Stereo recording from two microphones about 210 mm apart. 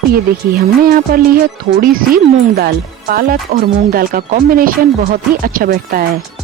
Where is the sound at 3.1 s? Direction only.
45° right (ahead or behind).